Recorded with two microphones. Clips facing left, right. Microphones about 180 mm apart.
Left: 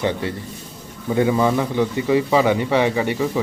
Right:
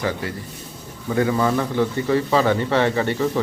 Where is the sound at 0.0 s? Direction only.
25° left (ahead or behind).